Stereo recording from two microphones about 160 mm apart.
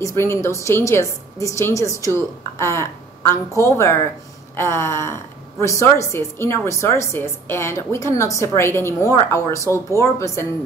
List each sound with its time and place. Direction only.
0.0 s a woman's voice: 15° left (ahead or behind)